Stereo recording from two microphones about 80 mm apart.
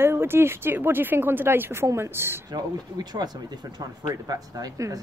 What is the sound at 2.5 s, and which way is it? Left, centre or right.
Speech, right.